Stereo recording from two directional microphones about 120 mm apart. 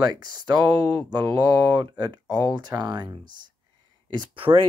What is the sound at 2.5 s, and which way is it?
Speech, 35° right (ahead or behind).